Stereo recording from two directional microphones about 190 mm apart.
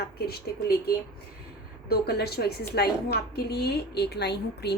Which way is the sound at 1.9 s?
55° left (ahead or behind).